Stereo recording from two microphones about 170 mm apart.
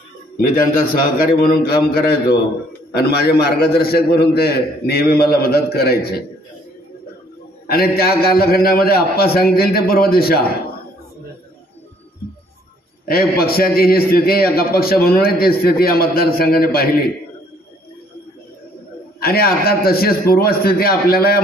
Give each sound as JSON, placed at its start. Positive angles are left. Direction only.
{"t": 0.9, "sound": "a man's voice", "side_deg": 60}
{"t": 7.6, "sound": "a man's voice", "side_deg": 65}
{"t": 13.0, "sound": "a man's voice", "side_deg": 65}
{"t": 19.1, "sound": "a man's voice", "side_deg": 65}